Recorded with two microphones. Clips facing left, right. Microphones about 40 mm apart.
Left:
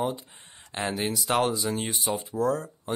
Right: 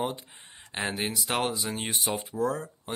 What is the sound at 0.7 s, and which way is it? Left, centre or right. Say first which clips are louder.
Speech: left 2 dB; centre.